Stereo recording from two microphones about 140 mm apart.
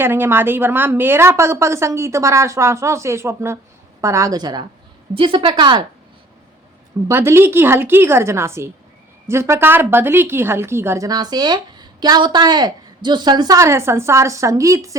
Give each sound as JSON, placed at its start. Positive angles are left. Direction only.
{"t": 0.0, "sound": "a woman's voice", "side_deg": -15}
{"t": 7.1, "sound": "a woman's voice", "side_deg": -20}